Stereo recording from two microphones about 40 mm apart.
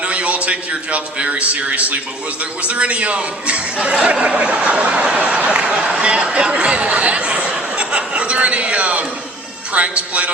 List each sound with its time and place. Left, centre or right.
0.0 s speech: right
7.8 s chuckle: right
9.7 s speech: right